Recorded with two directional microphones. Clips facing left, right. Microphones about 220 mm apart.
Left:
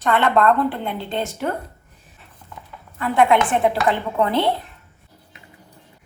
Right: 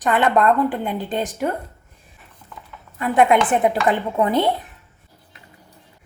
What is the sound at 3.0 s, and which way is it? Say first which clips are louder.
Speech: right 1 dB; 20° right (ahead or behind).